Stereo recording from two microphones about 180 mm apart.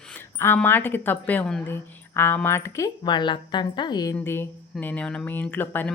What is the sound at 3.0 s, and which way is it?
A woman's voice, 25° left (ahead or behind).